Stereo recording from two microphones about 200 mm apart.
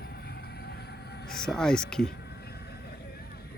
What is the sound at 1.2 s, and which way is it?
Speech, 5° left (ahead or behind).